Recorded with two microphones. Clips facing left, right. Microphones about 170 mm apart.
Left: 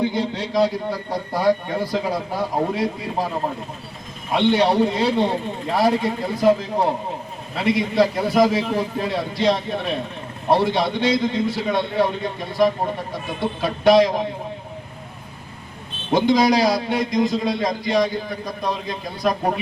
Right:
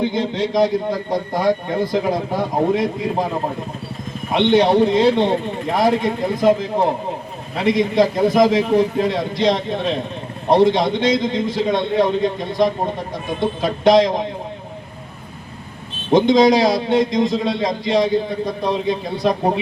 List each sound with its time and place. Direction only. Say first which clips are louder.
0.0 s a man's voice: right 3 dB; 20° right (ahead or behind)
4.3 s a man's voice: right 3 dB; 20° right (ahead or behind)
16.1 s a man's voice: right 4 dB; 20° right (ahead or behind)